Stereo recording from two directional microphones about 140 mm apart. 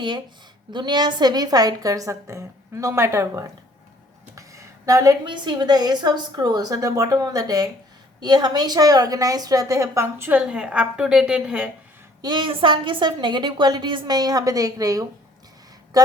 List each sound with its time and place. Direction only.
0.7 s a woman's voice: 30° right (ahead or behind); by 11.7 s 10° right (ahead or behind)
12.2 s a woman's voice: 35° right (ahead or behind)